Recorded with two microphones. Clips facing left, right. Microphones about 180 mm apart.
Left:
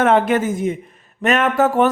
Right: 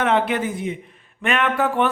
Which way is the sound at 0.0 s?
45° left (ahead or behind).